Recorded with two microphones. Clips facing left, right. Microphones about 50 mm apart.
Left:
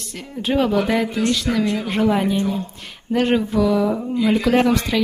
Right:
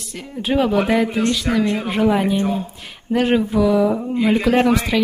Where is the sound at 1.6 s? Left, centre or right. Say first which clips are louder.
Right 1 dB; right.